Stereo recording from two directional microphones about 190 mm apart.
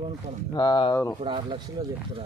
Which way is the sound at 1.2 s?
25° right (ahead or behind).